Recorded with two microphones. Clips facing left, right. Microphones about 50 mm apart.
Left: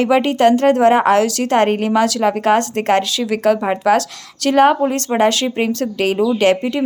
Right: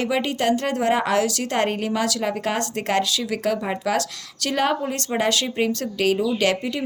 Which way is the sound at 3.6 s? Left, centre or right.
Left.